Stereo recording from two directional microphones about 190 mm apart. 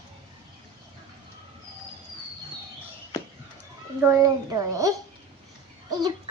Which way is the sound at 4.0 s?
15° right (ahead or behind).